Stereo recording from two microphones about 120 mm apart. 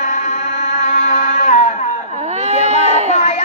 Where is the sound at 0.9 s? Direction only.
70° left (ahead or behind).